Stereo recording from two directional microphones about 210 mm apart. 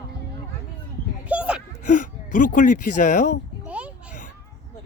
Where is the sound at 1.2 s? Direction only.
5° right (ahead or behind).